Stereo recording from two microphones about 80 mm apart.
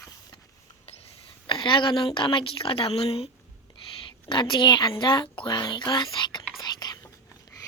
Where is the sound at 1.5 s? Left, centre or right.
Left.